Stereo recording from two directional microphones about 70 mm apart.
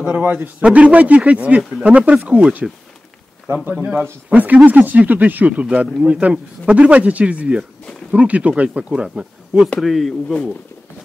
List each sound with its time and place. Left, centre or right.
0.0 s a man's voice: right
4.3 s a man's voice: right
9.8 s speech: centre